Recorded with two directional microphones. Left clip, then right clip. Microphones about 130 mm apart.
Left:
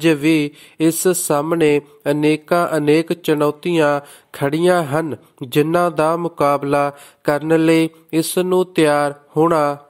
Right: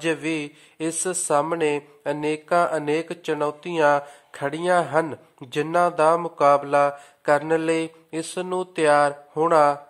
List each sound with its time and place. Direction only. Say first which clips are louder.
0.0 s speech: left 10 dB; 35° left (ahead or behind)